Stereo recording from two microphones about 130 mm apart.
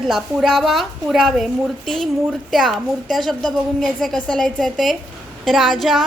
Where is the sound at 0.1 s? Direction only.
Centre (ahead or behind).